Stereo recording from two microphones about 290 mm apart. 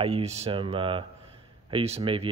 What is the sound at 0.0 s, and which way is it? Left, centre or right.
Speech, right.